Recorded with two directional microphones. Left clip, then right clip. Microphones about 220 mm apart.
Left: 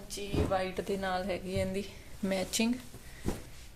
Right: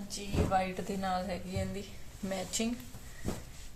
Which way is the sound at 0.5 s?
45° left (ahead or behind).